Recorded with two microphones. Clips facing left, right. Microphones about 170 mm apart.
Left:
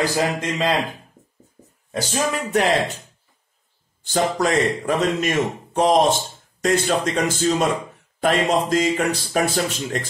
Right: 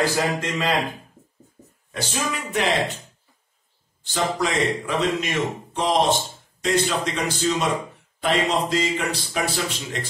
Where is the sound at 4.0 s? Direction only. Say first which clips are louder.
Left 4 dB; 45° left (ahead or behind).